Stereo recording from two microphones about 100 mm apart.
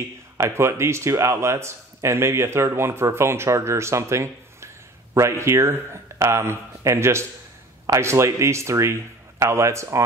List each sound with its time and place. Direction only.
0.4 s speech: 25° right (ahead or behind)